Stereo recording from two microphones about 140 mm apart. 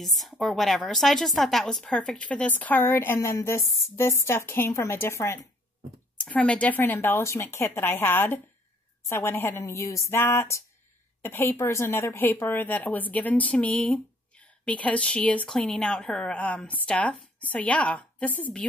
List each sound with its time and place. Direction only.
0.0 s a woman's voice: centre (ahead or behind); by 5.5 s 20° left (ahead or behind)
6.1 s a woman's voice: 10° left (ahead or behind)